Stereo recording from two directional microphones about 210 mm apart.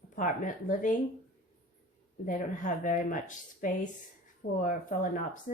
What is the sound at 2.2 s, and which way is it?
A woman's voice, 40° left (ahead or behind).